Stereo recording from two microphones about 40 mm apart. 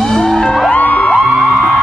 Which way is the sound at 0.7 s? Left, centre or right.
Left.